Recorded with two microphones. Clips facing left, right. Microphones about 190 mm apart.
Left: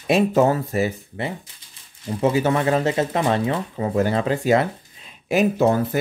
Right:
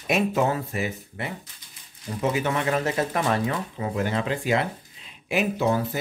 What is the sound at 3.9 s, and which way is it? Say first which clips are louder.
Speech: left 6 dB; 35° left (ahead or behind).